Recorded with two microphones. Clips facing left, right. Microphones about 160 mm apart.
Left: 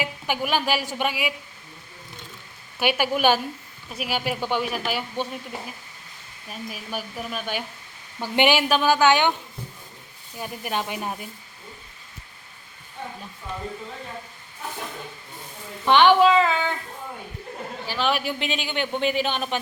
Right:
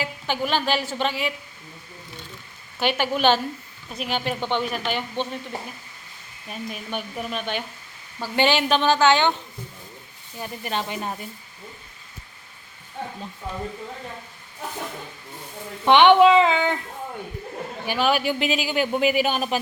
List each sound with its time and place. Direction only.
0.0 s speech: 10° left (ahead or behind)
2.7 s speech: 10° left (ahead or behind)
6.5 s speech: 5° left (ahead or behind)
8.2 s speech: 15° left (ahead or behind)
10.3 s speech: 10° left (ahead or behind)
15.9 s speech: 20° right (ahead or behind)
17.8 s a man's voice: 15° right (ahead or behind)
18.1 s speech: centre (ahead or behind)